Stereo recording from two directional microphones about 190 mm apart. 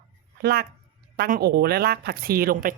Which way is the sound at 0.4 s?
55° right (ahead or behind).